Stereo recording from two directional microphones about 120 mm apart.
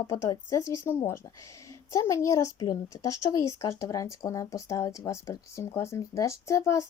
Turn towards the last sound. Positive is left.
turn(degrees=25)  # may be behind; listen again after turning